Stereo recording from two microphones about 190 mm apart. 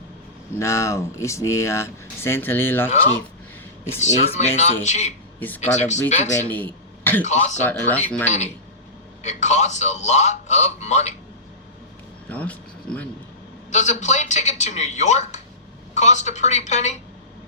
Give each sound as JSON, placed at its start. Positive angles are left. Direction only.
{"t": 0.6, "sound": "speech", "side_deg": 15}
{"t": 2.9, "sound": "a man's voice", "side_deg": 35}
{"t": 6.5, "sound": "a sound", "side_deg": 10}
{"t": 7.3, "sound": "a man's voice", "side_deg": 40}
{"t": 7.6, "sound": "speech", "side_deg": 10}
{"t": 8.2, "sound": "a man's voice", "side_deg": 35}
{"t": 12.3, "sound": "speech", "side_deg": 10}
{"t": 13.7, "sound": "a man's voice", "side_deg": 35}